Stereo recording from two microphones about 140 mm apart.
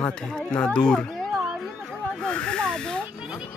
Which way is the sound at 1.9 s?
5° left (ahead or behind).